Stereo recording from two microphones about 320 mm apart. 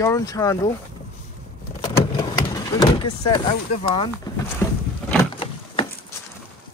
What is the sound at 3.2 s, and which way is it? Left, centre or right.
Speech, centre.